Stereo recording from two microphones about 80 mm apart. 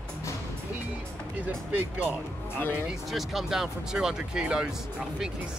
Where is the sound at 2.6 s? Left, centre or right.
Left.